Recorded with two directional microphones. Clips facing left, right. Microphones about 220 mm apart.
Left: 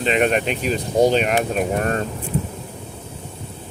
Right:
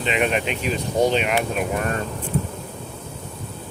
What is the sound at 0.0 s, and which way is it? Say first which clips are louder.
Speech: left 3 dB; 40° left (ahead or behind).